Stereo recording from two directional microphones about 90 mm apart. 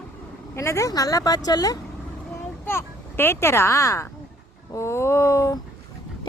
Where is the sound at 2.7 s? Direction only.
25° left (ahead or behind).